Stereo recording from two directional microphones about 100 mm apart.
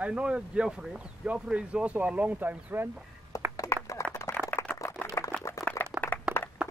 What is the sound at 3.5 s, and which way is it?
Clapping, 35° left (ahead or behind).